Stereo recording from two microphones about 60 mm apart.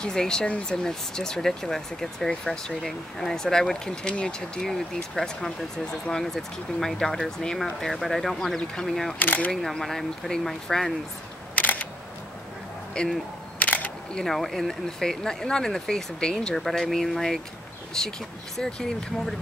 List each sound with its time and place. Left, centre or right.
0.0 s speech: centre
9.2 s speech: left
9.5 s speech: centre
11.5 s single-lens reflex camera: left
13.0 s speech: centre
13.6 s single-lens reflex camera: left
14.1 s speech: centre